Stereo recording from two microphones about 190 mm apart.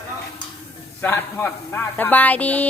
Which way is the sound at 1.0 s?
10° left (ahead or behind).